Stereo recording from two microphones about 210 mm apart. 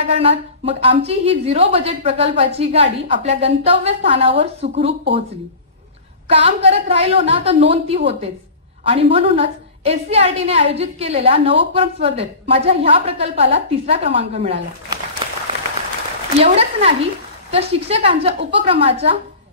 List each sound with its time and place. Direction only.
0.1 s a woman's voice: 25° right (ahead or behind)
6.2 s a woman's voice: 25° right (ahead or behind)
16.3 s a woman's voice: 30° right (ahead or behind)